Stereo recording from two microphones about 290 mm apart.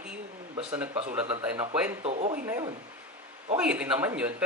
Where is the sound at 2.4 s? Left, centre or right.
Centre.